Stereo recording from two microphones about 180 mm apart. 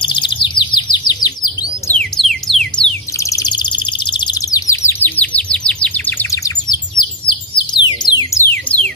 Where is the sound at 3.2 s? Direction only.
20° left (ahead or behind).